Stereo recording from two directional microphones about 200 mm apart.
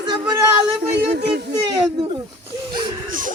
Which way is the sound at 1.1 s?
55° right (ahead or behind).